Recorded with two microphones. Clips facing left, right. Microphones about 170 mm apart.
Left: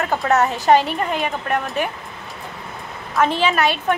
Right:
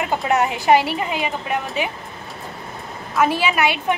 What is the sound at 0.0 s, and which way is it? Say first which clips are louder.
A woman's voice: left 1 dB; 15° right (ahead or behind).